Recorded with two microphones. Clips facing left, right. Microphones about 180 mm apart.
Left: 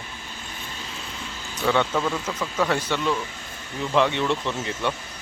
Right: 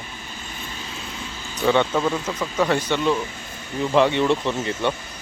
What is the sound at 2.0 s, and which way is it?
Speech, 5° right (ahead or behind).